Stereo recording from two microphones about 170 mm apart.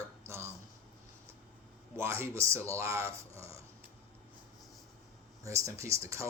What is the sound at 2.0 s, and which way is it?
Speech, 15° right (ahead or behind).